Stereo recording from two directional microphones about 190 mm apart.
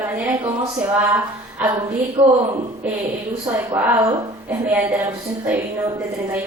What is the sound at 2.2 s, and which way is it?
Speech, 25° right (ahead or behind).